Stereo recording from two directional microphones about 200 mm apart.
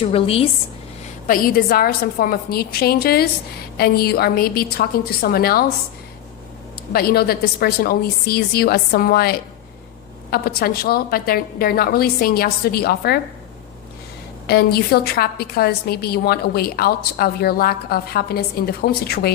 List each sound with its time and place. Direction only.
0.0 s a woman's voice: 30° left (ahead or behind)
1.3 s a woman's voice: 45° left (ahead or behind)
6.9 s a woman's voice: 50° left (ahead or behind)
14.4 s a woman's voice: 50° left (ahead or behind)